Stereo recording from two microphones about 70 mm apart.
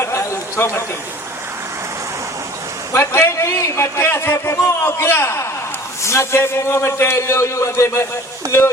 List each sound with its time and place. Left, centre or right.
0.0 s chatter: left
2.9 s a man's voice: left